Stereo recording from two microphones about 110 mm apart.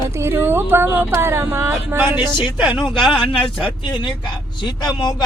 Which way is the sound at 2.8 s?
50° left (ahead or behind).